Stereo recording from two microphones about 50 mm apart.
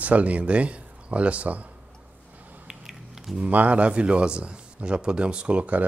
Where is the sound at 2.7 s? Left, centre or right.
Centre.